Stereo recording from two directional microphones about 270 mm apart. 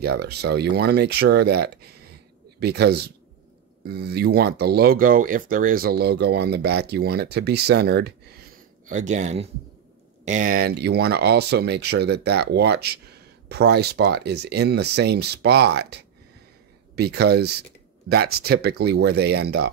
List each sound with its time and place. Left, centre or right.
0.0 s speech: right